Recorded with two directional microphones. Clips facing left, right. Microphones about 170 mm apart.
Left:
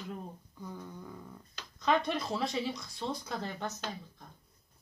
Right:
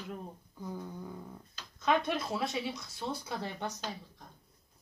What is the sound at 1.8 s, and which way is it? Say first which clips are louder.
Speech: even; 5° right (ahead or behind).